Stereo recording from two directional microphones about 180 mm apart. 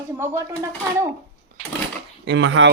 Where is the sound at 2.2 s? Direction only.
85° right.